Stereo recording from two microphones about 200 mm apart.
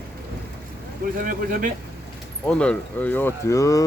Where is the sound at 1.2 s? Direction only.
40° right (ahead or behind).